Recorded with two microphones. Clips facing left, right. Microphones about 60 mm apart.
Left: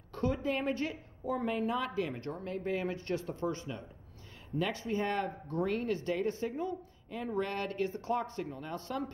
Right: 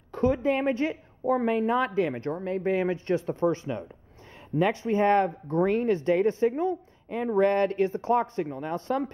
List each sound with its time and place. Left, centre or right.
0.1 s a woman's voice: right